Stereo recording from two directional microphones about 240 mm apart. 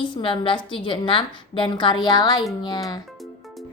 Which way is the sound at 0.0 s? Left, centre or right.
Left.